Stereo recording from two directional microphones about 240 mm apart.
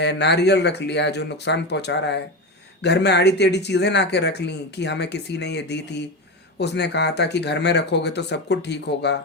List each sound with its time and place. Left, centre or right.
0.0 s speech: left